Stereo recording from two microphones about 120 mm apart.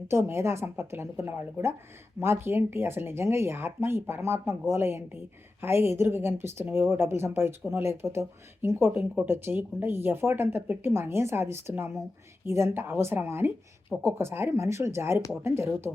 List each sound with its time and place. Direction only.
0.1 s speech: 20° right (ahead or behind)